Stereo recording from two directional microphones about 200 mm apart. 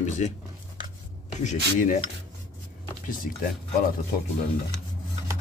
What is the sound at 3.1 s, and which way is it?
Speech, 40° left (ahead or behind).